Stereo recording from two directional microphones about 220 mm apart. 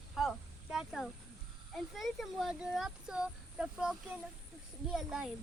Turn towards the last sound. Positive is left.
turn(degrees=0)  # may be behind; listen again after turning